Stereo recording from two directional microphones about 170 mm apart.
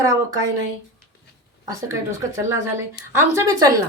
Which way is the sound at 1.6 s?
15° right (ahead or behind).